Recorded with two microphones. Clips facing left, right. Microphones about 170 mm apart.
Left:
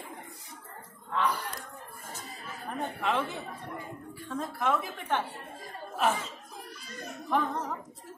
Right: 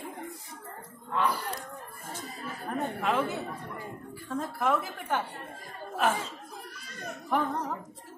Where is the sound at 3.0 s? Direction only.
5° right (ahead or behind).